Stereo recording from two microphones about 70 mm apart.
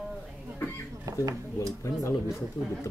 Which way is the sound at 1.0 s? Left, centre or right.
Right.